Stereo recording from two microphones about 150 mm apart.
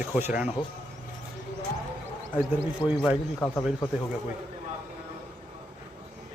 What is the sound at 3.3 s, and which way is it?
Speech, 15° left (ahead or behind).